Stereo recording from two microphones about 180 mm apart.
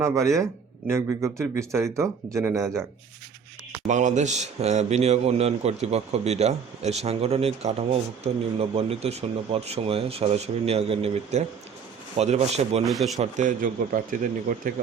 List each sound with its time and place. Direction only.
0.0 s speech: 15° right (ahead or behind)
3.8 s a man's voice: 40° right (ahead or behind)
12.8 s speech: centre (ahead or behind)
13.1 s speech: 45° right (ahead or behind)